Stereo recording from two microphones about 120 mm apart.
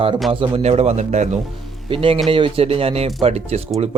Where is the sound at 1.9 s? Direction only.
50° right (ahead or behind).